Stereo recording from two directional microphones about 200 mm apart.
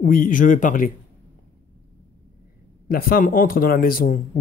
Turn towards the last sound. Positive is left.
turn(degrees=45)  # may be behind; listen again after turning